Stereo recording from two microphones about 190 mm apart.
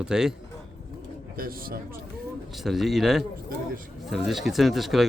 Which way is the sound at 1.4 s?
50° right (ahead or behind).